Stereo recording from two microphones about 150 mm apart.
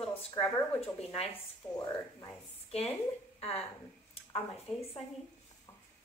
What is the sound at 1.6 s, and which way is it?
Speech, 15° left (ahead or behind).